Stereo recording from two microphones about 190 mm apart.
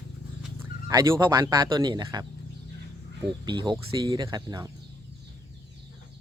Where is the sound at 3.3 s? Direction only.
25° right (ahead or behind).